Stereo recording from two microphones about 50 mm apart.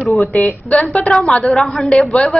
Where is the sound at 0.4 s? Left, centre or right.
Left.